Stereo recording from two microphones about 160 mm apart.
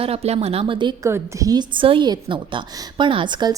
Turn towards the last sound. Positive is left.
turn(degrees=-25)  # may be behind; listen again after turning